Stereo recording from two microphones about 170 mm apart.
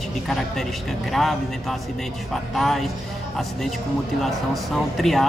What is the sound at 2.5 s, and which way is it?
Speech, centre (ahead or behind).